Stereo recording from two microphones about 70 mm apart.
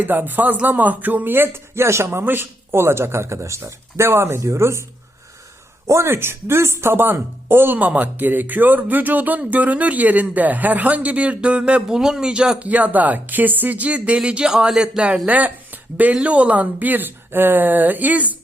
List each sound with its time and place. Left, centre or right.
0.0 s speech: right
2.0 s speech: right
5.9 s speech: right; by 15.2 s centre
15.3 s speech: right